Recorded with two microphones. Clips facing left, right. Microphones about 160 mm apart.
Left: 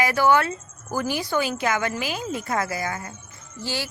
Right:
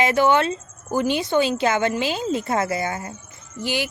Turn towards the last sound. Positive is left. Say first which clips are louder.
# right 5 dB
turn(degrees=-15)  # may be behind; listen again after turning